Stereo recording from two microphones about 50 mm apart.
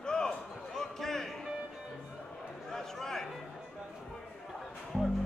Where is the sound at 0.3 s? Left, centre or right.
Centre.